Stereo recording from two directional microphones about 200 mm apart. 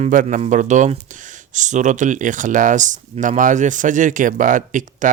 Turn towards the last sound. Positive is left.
turn(degrees=-40)  # may be behind; listen again after turning